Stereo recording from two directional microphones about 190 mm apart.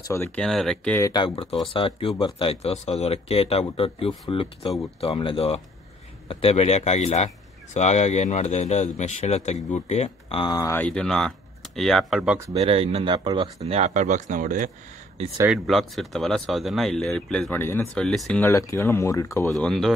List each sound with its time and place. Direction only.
0.0 s speech: 15° left (ahead or behind)
0.4 s speech: centre (ahead or behind)
1.0 s speech: 25° left (ahead or behind)
10.8 s speech: 5° left (ahead or behind)
12.5 s speech: 30° right (ahead or behind)
15.5 s speech: centre (ahead or behind)
19.5 s speech: centre (ahead or behind)